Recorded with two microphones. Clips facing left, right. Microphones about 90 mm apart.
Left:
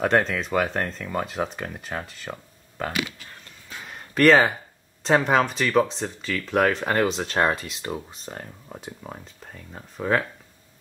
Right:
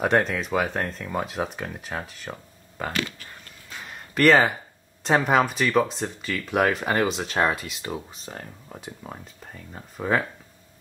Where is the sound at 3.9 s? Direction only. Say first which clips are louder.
Left 1 dB; centre (ahead or behind).